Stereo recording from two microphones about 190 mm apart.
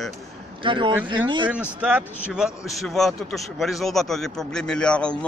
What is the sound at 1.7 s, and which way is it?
A man's voice, 5° right (ahead or behind).